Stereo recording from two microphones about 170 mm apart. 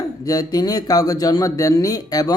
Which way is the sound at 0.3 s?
20° left (ahead or behind).